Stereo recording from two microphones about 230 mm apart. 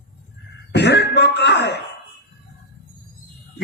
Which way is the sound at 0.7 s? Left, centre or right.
Left.